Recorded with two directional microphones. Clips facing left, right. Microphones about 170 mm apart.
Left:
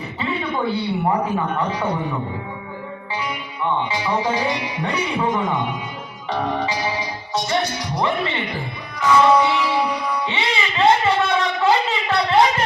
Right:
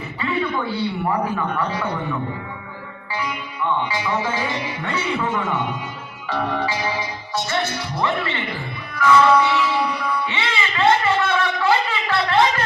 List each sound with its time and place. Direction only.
0.2 s speech: 25° left (ahead or behind)
1.5 s music: 25° left (ahead or behind)
3.8 s speech: 20° left (ahead or behind)
9.0 s music: 20° left (ahead or behind)